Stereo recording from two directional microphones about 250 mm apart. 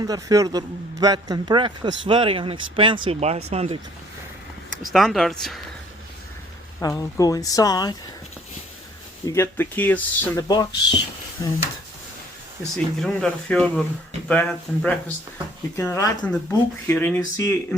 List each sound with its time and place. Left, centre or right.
0.0 s a man's voice: centre
4.9 s speech: centre
6.7 s speech: centre
9.2 s speech: centre
12.7 s speech: centre